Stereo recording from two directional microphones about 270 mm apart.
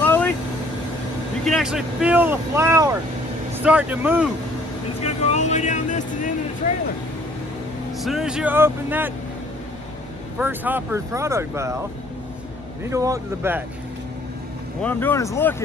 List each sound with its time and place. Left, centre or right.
0.0 s vehicle: centre
1.4 s speech: centre
5.0 s vehicle: left
8.0 s speech: centre
10.4 s speech: centre
12.9 s speech: centre
14.8 s speech: centre